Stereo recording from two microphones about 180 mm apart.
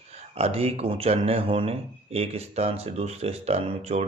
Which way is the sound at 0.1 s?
35° right (ahead or behind).